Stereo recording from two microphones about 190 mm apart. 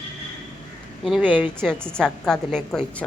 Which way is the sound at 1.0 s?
5° right (ahead or behind).